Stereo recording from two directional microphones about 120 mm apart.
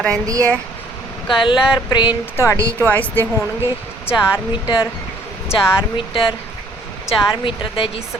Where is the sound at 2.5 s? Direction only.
25° right (ahead or behind).